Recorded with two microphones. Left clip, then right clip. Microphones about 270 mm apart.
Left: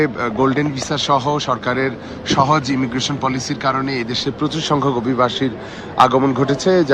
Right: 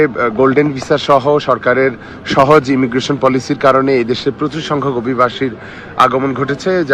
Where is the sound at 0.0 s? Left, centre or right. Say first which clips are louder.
Right 6 dB; centre.